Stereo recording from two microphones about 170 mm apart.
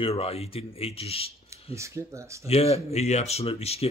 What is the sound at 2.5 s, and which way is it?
A man's voice, 35° left (ahead or behind).